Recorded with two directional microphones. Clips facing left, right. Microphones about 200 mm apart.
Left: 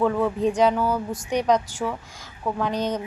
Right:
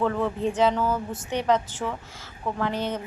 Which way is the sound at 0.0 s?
10° left (ahead or behind).